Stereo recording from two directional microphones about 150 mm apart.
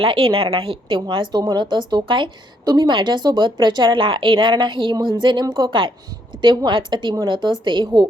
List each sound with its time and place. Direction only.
0.0 s a woman's voice: 35° right (ahead or behind)